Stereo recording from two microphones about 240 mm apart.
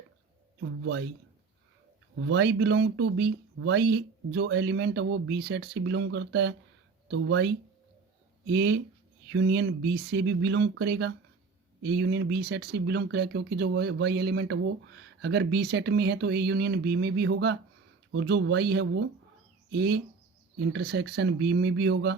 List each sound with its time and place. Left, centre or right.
0.6 s speech: right
2.1 s speech: right